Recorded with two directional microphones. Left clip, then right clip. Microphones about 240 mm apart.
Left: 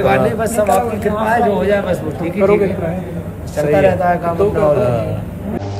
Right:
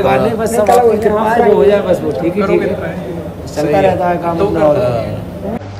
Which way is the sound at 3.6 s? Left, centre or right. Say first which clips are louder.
Right 1 dB; centre.